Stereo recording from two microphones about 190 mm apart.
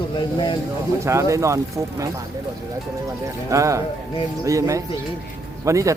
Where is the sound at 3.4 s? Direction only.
15° right (ahead or behind).